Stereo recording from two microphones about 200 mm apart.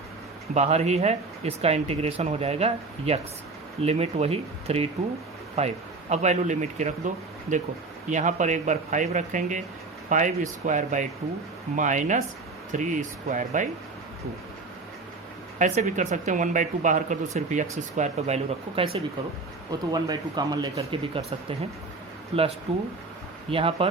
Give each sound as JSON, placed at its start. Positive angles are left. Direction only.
{"t": 0.5, "sound": "speech", "side_deg": -35}
{"t": 15.5, "sound": "speech", "side_deg": -35}
{"t": 18.9, "sound": "speech", "side_deg": -25}